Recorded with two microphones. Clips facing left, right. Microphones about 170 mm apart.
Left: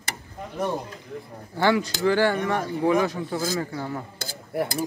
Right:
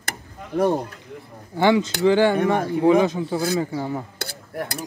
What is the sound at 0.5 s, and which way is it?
Speech, 65° right (ahead or behind).